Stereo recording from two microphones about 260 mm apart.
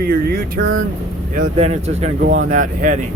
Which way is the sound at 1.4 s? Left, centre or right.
Right.